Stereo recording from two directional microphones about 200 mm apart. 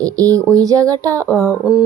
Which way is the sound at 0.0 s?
15° right (ahead or behind).